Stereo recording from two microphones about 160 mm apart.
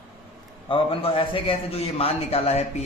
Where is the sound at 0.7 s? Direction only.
35° left (ahead or behind).